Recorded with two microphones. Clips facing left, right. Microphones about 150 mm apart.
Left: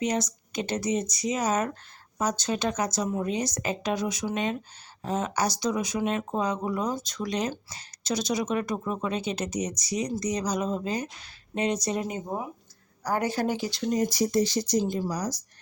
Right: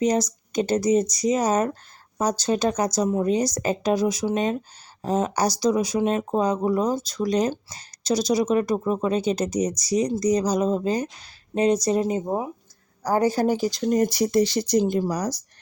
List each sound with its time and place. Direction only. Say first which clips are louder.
0.0 s speech: right 6 dB; 40° right (ahead or behind); by 15.4 s 65° right (ahead or behind)